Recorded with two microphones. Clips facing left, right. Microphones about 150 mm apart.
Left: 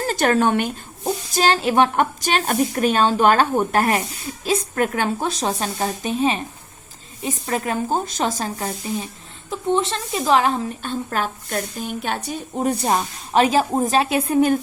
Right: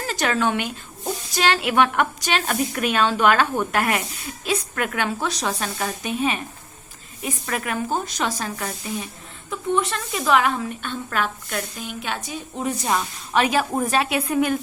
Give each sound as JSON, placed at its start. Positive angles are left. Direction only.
{"t": 0.0, "sound": "a woman's voice", "side_deg": 45}